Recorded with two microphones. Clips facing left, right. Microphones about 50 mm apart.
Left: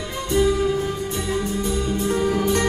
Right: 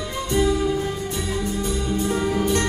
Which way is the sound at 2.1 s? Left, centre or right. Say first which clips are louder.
Left 2 dB; centre.